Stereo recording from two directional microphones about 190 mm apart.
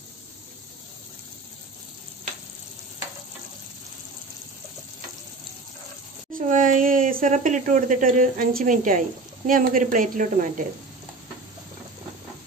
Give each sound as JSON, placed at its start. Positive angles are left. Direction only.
{"t": 6.3, "sound": "a woman's voice", "side_deg": -45}